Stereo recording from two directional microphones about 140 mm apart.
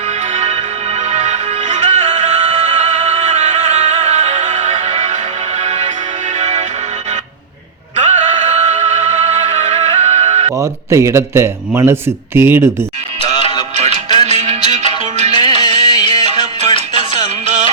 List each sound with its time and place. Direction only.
0.3 s music: 50° right (ahead or behind)
7.9 s music: 60° right (ahead or behind)
10.6 s a man's voice: 20° right (ahead or behind)
13.4 s music: 40° left (ahead or behind)
13.7 s music: 50° right (ahead or behind)
15.3 s music: 35° left (ahead or behind)
16.3 s music: 55° right (ahead or behind)
16.7 s music: 40° left (ahead or behind)
17.2 s music: 60° right (ahead or behind)